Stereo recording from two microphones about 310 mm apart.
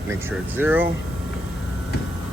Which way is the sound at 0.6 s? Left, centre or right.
Centre.